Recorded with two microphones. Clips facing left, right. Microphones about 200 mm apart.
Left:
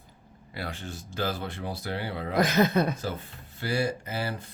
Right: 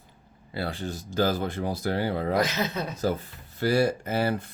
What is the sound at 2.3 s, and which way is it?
Speech, 55° left (ahead or behind).